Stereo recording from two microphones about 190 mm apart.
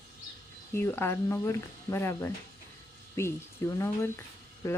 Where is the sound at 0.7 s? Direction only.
10° left (ahead or behind).